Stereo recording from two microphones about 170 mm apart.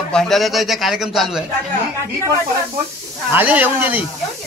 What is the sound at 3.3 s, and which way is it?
Speech, 10° right (ahead or behind).